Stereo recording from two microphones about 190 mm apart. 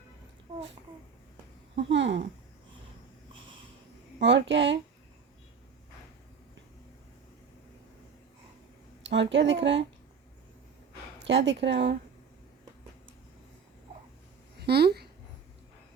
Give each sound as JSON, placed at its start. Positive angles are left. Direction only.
{"t": 1.7, "sound": "speech", "side_deg": -70}
{"t": 4.2, "sound": "speech", "side_deg": -70}
{"t": 9.0, "sound": "speech", "side_deg": -70}
{"t": 11.2, "sound": "speech", "side_deg": -65}
{"t": 14.6, "sound": "speech", "side_deg": -60}